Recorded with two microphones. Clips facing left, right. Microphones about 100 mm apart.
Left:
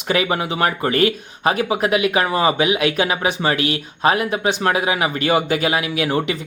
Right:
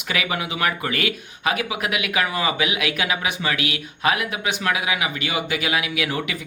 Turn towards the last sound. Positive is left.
turn(degrees=30)  # may be behind; listen again after turning